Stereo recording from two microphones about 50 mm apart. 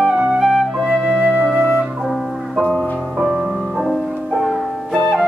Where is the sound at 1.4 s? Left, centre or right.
Centre.